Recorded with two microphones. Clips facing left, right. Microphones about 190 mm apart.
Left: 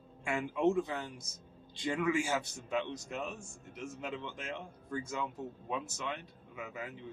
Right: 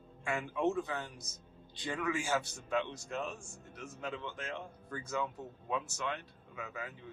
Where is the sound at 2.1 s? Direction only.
20° left (ahead or behind).